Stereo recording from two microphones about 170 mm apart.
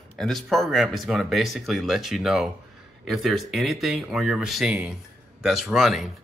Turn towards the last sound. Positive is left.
turn(degrees=0)  # may be behind; listen again after turning